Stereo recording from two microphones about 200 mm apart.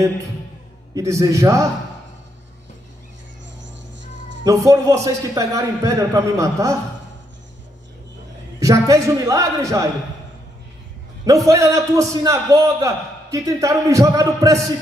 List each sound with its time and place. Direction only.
0.9 s a man's voice: 15° right (ahead or behind)
3.5 s music: 65° right (ahead or behind)
4.5 s a man's voice: 15° right (ahead or behind)
8.5 s a man's voice: 15° right (ahead or behind)
11.4 s a man's voice: 15° right (ahead or behind)